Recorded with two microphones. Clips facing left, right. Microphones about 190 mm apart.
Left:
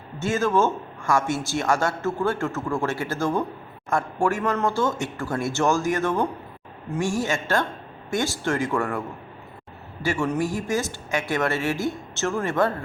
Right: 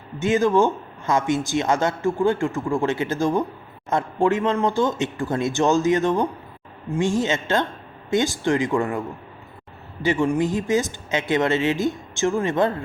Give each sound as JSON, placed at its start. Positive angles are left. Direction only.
{"t": 0.2, "sound": "speech", "side_deg": -15}